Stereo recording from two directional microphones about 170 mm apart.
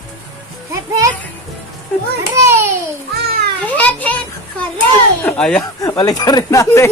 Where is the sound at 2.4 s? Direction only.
15° right (ahead or behind).